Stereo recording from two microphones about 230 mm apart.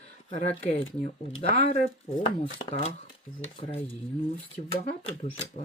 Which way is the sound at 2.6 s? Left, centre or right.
Left.